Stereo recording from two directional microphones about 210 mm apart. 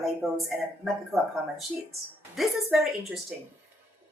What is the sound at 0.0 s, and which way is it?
Speech, centre (ahead or behind).